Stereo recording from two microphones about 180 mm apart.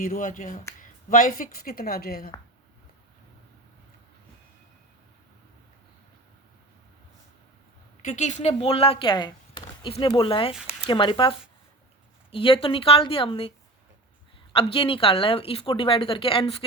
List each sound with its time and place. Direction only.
0.0 s speech: 50° left (ahead or behind)
8.0 s speech: 40° left (ahead or behind)
14.5 s speech: 30° left (ahead or behind)